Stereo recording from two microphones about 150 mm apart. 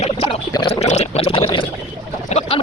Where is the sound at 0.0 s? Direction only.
40° left (ahead or behind).